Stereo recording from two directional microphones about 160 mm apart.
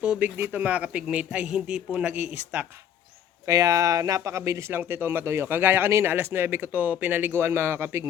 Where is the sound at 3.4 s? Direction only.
20° right (ahead or behind).